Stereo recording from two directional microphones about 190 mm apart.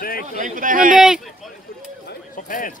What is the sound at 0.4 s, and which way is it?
Speech, 45° right (ahead or behind).